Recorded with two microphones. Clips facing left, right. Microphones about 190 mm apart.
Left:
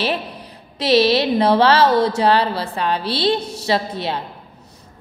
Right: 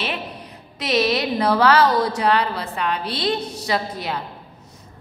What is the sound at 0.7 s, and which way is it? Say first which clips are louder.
A woman's voice: left 5 dB; 30° left (ahead or behind).